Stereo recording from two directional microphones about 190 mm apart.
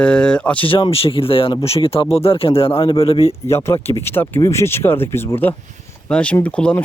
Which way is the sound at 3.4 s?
15° left (ahead or behind).